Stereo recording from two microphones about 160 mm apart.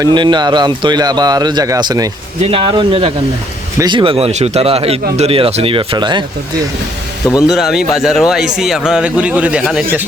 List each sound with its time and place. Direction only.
0.0 s a man's voice: 30° right (ahead or behind)
2.4 s speech: 35° right (ahead or behind)
7.4 s speech: centre (ahead or behind)